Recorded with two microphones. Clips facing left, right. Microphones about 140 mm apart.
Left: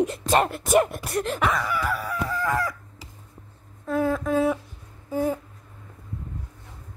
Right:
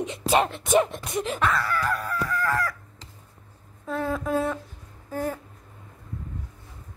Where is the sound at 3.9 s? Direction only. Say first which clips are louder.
Left 3 dB; centre (ahead or behind).